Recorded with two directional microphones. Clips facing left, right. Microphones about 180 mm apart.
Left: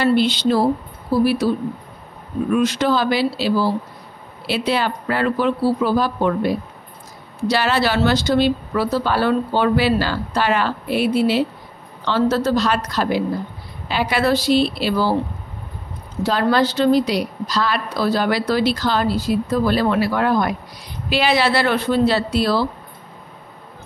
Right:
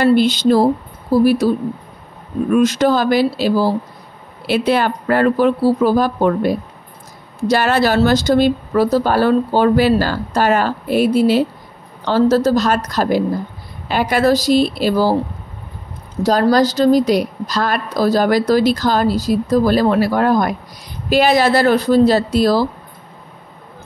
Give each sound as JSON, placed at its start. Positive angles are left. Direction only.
{"t": 0.0, "sound": "speech", "side_deg": -45}
{"t": 2.5, "sound": "speech", "side_deg": -45}
{"t": 16.2, "sound": "a woman's voice", "side_deg": -40}